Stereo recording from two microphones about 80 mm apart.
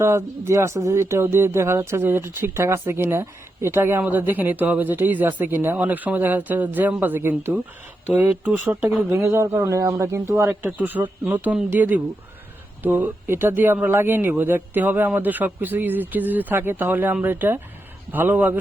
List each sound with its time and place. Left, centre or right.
0.0 s speech: right
9.0 s speech: right
10.8 s speech: right